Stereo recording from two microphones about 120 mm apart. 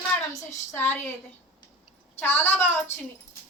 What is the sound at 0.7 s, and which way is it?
Speech, 15° left (ahead or behind).